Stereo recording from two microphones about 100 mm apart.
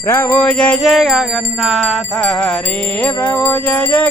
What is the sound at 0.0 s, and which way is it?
Music, 25° left (ahead or behind).